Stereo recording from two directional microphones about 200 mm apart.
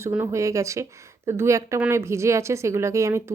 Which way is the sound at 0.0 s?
15° right (ahead or behind).